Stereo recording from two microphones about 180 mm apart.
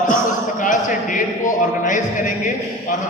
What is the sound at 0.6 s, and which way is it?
A man's voice, 45° left (ahead or behind).